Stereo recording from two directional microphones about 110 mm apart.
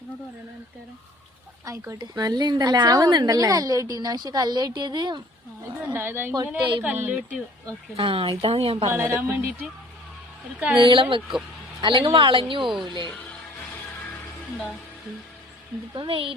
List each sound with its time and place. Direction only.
1.6 s a woman's voice: 30° right (ahead or behind)
5.6 s speech: 20° right (ahead or behind)
7.9 s a woman's voice: 55° right (ahead or behind)
8.9 s speech: 25° right (ahead or behind)
10.8 s speech: 50° right (ahead or behind)
16.0 s a woman's voice: 55° right (ahead or behind)